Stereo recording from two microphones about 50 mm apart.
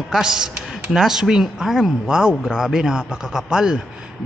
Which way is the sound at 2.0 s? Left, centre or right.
Centre.